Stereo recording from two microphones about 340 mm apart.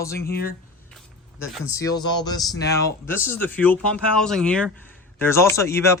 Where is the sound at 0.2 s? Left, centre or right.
Left.